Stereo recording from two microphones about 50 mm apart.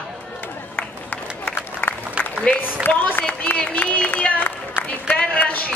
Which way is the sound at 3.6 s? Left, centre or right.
Left.